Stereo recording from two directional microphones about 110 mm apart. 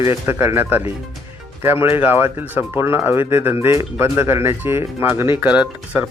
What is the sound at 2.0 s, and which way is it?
Speech, 20° right (ahead or behind).